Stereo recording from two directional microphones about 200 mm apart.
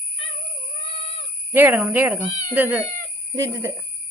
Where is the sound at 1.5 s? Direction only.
10° right (ahead or behind).